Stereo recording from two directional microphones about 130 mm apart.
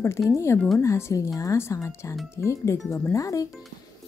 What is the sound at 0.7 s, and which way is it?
Speech, 20° left (ahead or behind).